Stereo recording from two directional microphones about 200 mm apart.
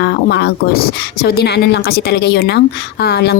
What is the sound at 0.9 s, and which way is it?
A woman's voice, 55° left (ahead or behind).